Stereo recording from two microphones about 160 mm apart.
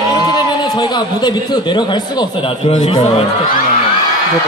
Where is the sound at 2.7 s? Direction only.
45° left (ahead or behind).